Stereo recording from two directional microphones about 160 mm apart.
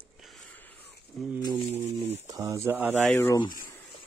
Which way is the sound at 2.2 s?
20° right (ahead or behind).